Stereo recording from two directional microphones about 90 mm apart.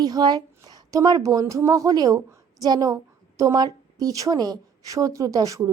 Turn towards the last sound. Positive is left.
turn(degrees=-40)  # may be behind; listen again after turning